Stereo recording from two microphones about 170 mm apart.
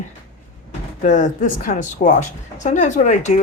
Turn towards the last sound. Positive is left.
turn(degrees=45)  # may be behind; listen again after turning